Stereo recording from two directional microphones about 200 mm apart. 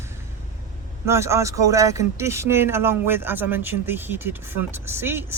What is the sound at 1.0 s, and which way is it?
Speech, 15° right (ahead or behind).